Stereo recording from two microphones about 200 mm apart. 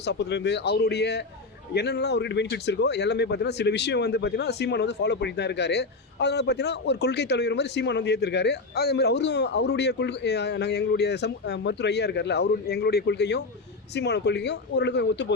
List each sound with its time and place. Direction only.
0.0 s a man's voice: 60° left (ahead or behind)